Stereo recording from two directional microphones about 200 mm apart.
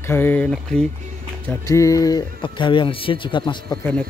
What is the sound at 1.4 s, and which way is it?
Speech, 15° left (ahead or behind).